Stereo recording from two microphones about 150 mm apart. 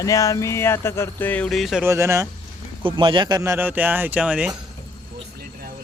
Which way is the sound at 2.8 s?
35° right (ahead or behind).